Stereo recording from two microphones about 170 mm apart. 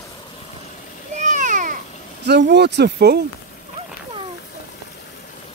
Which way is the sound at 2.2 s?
80° right.